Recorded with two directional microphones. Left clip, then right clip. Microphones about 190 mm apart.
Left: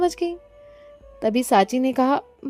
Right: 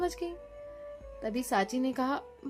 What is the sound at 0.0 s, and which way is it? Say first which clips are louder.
A woman's voice: left 11 dB; 45° left (ahead or behind).